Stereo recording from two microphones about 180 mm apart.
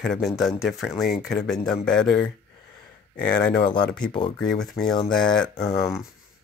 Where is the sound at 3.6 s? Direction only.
25° left (ahead or behind).